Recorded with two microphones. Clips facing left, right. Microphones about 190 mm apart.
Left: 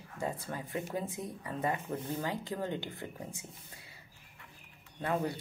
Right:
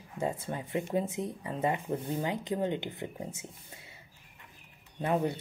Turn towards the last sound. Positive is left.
turn(degrees=-25)  # may be behind; listen again after turning